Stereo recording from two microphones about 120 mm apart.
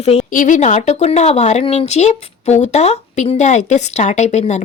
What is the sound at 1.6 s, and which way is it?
Speech, 55° left (ahead or behind).